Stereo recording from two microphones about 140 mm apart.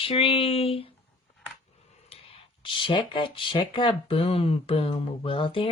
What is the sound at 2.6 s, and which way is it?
Speech, 35° left (ahead or behind).